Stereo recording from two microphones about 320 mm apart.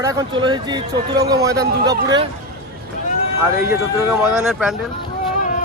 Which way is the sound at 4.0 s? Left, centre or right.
Centre.